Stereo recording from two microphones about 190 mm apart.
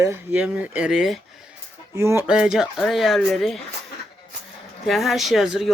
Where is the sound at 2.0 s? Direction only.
10° right (ahead or behind).